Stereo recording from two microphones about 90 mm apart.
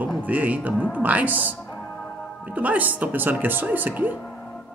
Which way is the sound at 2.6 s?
20° right (ahead or behind).